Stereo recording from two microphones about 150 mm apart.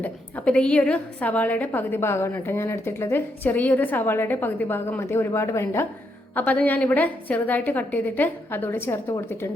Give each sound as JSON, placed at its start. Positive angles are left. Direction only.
{"t": 0.0, "sound": "a woman's voice", "side_deg": 10}